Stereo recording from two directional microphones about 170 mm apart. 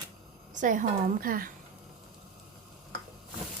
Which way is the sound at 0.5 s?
50° right (ahead or behind).